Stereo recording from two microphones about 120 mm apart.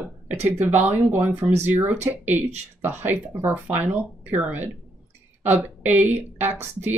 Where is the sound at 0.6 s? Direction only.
15° right (ahead or behind).